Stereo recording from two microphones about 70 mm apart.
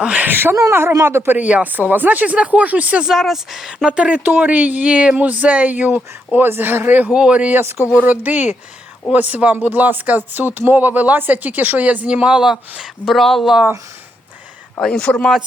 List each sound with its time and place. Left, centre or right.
0.0 s speech: centre
0.3 s speech: right
1.4 s speech: right
3.1 s speech: centre
7.6 s speech: right
7.9 s speech: right; by 13.1 s centre
13.1 s speech: centre
14.8 s a man's voice: centre